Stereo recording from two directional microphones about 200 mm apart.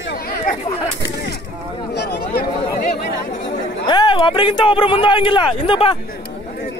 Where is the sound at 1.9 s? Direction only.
55° left (ahead or behind).